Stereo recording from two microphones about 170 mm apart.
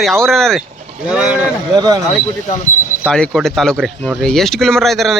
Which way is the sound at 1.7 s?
25° right (ahead or behind).